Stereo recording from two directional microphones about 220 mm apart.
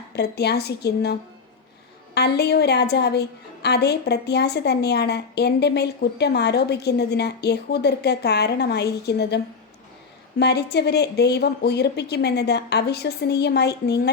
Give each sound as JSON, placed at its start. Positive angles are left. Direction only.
{"t": 0.2, "sound": "a woman's voice", "side_deg": 50}
{"t": 2.1, "sound": "a woman's voice", "side_deg": 50}